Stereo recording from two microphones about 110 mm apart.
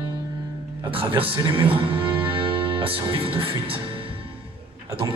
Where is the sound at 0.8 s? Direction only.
55° right (ahead or behind).